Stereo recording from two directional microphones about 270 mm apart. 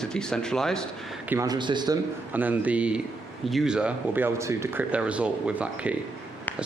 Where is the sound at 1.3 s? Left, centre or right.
Centre.